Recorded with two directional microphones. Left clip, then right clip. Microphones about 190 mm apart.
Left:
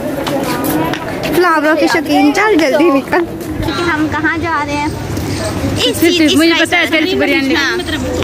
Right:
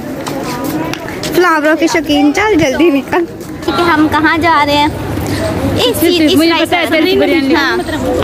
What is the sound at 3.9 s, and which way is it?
A woman's voice, 60° right (ahead or behind).